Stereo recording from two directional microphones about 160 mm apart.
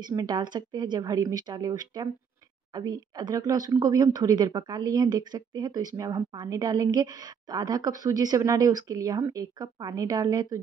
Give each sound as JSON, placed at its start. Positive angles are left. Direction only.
{"t": 0.0, "sound": "speech", "side_deg": -25}